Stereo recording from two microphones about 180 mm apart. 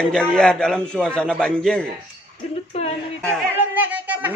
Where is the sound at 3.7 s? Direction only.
10° right (ahead or behind).